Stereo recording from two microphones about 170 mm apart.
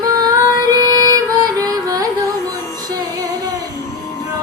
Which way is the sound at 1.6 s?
20° right (ahead or behind).